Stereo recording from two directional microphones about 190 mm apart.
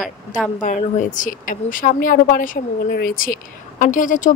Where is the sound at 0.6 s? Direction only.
40° left (ahead or behind).